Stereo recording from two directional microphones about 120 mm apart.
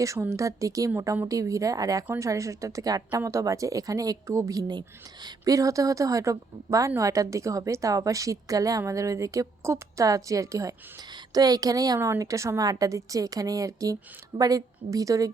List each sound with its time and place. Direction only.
0.0 s a woman's voice: 25° right (ahead or behind)